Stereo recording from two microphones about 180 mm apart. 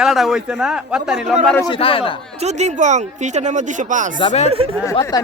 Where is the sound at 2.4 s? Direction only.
40° right (ahead or behind).